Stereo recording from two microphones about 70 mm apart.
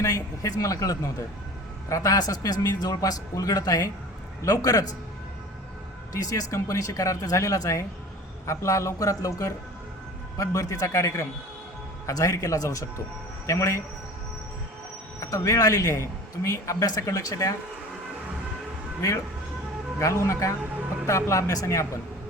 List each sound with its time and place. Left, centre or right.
0.0 s a man's voice: left
6.1 s speech: left
15.2 s a man's voice: left
20.0 s speech: left